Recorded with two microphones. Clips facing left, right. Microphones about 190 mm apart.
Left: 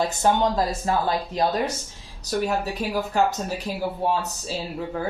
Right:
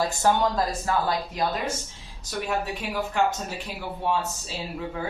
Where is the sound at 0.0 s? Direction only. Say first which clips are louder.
Left 2 dB; 20° left (ahead or behind).